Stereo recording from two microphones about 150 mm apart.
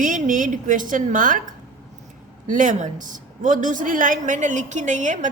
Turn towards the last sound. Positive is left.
turn(degrees=-55)  # may be behind; listen again after turning